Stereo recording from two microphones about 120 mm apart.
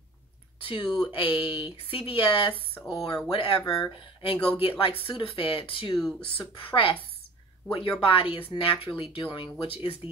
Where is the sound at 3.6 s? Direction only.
30° left (ahead or behind).